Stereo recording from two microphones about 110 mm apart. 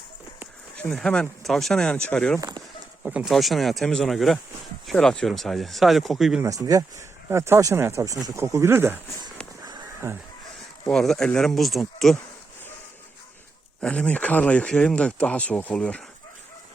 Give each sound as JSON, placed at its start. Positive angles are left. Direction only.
{"t": 0.8, "sound": "speech", "side_deg": 5}
{"t": 2.4, "sound": "speech", "side_deg": -35}
{"t": 3.0, "sound": "speech", "side_deg": -10}
{"t": 3.2, "sound": "speech", "side_deg": 0}
{"t": 7.3, "sound": "speech", "side_deg": -25}
{"t": 10.0, "sound": "speech", "side_deg": -25}
{"t": 10.8, "sound": "speech", "side_deg": 5}
{"t": 13.8, "sound": "speech", "side_deg": 10}